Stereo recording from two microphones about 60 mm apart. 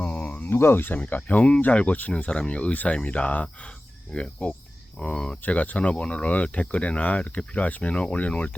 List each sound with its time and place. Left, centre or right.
0.0 s a sound: left
0.5 s speech: left
0.9 s speech: left
5.4 s speech: left